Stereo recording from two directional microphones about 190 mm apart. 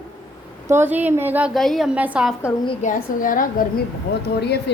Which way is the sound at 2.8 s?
45° left (ahead or behind).